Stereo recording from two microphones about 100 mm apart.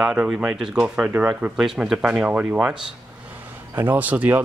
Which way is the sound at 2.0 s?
15° right (ahead or behind).